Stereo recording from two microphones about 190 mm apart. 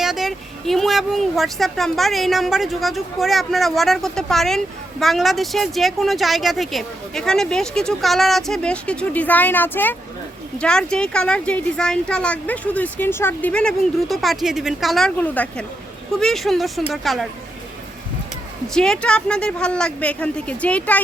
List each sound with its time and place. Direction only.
0.0 s speech: centre (ahead or behind)
18.7 s speech: 5° left (ahead or behind)